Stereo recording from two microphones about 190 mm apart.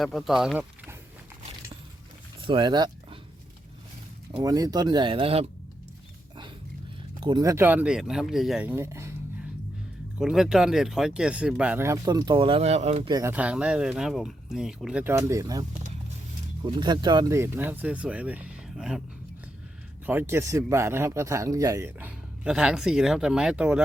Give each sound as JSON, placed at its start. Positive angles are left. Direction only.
{"t": 0.0, "sound": "speech", "side_deg": 0}
{"t": 2.5, "sound": "speech", "side_deg": -25}
{"t": 4.4, "sound": "speech", "side_deg": -20}
{"t": 7.2, "sound": "speech", "side_deg": -20}
{"t": 10.2, "sound": "speech", "side_deg": -5}
{"t": 13.1, "sound": "speech", "side_deg": -20}
{"t": 13.3, "sound": "speech", "side_deg": -5}
{"t": 16.6, "sound": "speech", "side_deg": -25}
{"t": 20.1, "sound": "speech", "side_deg": -10}